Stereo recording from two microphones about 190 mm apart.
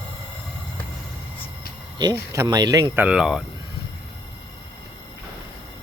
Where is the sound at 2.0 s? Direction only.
20° right (ahead or behind).